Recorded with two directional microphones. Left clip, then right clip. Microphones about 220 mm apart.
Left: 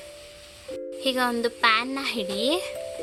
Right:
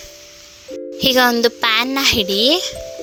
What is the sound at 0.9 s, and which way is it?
A child's voice, 35° right (ahead or behind).